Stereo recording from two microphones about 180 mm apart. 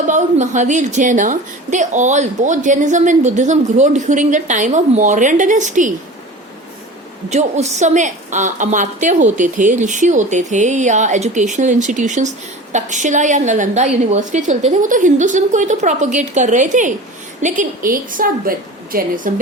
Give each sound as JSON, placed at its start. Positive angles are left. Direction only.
{"t": 0.1, "sound": "a woman's voice", "side_deg": -40}
{"t": 7.3, "sound": "a woman's voice", "side_deg": -40}